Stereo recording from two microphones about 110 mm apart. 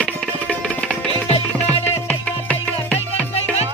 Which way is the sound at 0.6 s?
5° left (ahead or behind).